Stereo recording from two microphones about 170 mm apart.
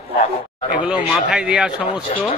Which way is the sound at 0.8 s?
5° right (ahead or behind).